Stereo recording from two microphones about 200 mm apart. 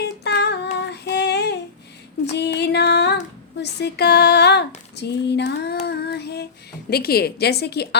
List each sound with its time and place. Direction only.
0.3 s child singing: 55° left (ahead or behind)
2.3 s music: 55° left (ahead or behind)
3.6 s female singing: 55° left (ahead or behind)
6.9 s a woman's voice: 50° left (ahead or behind)